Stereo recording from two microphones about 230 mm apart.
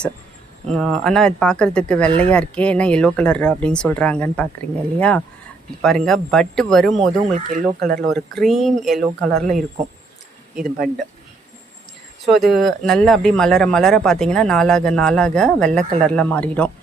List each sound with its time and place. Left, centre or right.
0.7 s speech: centre
7.3 s speech: right
8.1 s speech: centre
12.2 s speech: centre